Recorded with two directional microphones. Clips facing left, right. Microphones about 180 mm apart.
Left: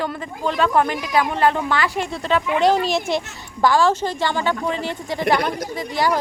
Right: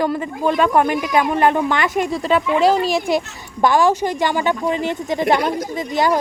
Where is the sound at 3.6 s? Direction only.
20° right (ahead or behind).